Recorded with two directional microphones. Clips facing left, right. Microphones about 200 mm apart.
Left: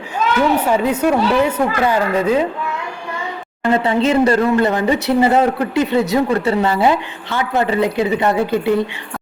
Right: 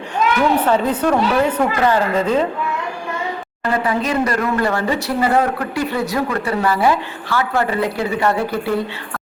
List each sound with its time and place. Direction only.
0.6 s a woman's voice: 10° left (ahead or behind)
3.6 s speech: 25° left (ahead or behind)